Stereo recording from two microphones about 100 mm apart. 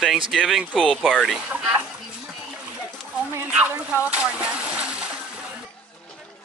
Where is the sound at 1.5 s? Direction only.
10° right (ahead or behind).